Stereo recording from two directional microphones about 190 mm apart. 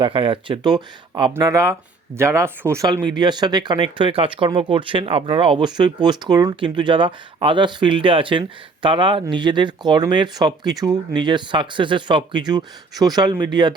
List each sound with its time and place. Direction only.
0.0 s speech: 25° right (ahead or behind)